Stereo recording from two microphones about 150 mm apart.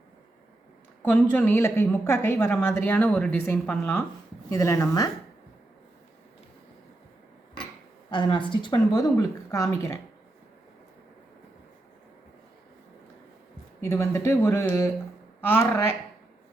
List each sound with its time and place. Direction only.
1.0 s a woman's voice: 10° left (ahead or behind)
8.1 s speech: 30° left (ahead or behind)
13.8 s a woman's voice: 20° left (ahead or behind)